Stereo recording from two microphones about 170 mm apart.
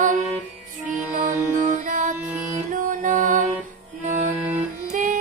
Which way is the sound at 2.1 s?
15° right (ahead or behind).